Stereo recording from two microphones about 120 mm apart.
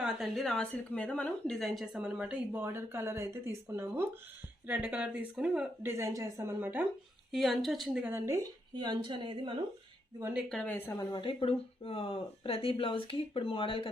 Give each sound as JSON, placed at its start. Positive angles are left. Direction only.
{"t": 0.0, "sound": "a woman's voice", "side_deg": 0}
{"t": 5.8, "sound": "a woman's voice", "side_deg": -25}
{"t": 6.6, "sound": "a woman's voice", "side_deg": -15}
{"t": 7.3, "sound": "a woman's voice", "side_deg": 0}
{"t": 8.0, "sound": "a woman's voice", "side_deg": -20}
{"t": 8.7, "sound": "a woman's voice", "side_deg": -40}
{"t": 10.5, "sound": "a woman's voice", "side_deg": 10}
{"t": 11.1, "sound": "speech", "side_deg": 40}